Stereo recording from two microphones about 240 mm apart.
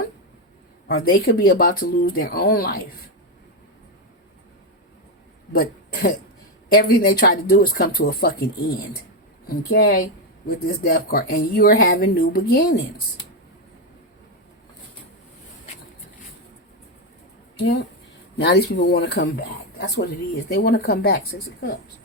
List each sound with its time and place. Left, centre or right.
0.9 s speech: left
5.5 s speech: left
18.3 s speech: left